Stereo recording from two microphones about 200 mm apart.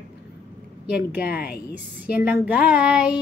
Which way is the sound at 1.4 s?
50° left (ahead or behind).